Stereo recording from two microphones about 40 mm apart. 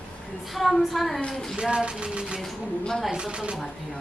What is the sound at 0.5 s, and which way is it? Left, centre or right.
A woman's voice, centre.